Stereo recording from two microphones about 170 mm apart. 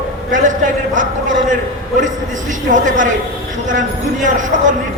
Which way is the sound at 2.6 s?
50° right (ahead or behind).